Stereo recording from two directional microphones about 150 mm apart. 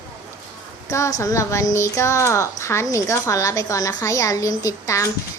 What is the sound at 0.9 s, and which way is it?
Speech, 20° left (ahead or behind).